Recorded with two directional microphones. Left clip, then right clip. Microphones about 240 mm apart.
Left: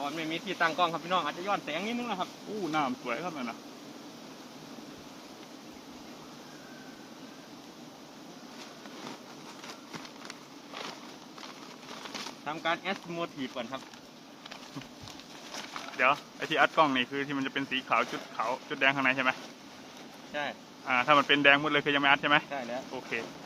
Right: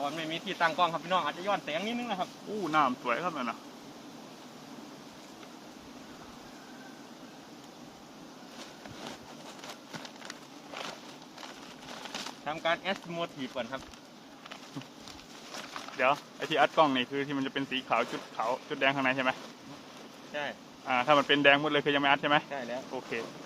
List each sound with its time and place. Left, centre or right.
0.0 s speech: centre
12.5 s speech: centre
15.5 s speech: centre